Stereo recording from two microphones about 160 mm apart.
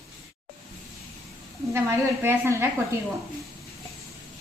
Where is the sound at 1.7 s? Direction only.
15° right (ahead or behind).